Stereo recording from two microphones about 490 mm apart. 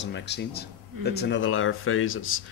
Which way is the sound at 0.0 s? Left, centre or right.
Left.